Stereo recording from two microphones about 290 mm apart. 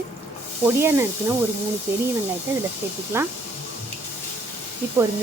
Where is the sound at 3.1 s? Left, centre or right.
Centre.